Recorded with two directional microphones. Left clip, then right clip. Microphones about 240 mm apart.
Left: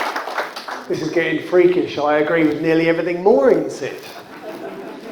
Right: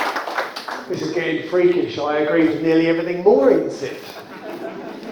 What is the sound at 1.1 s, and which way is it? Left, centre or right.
Speech, left.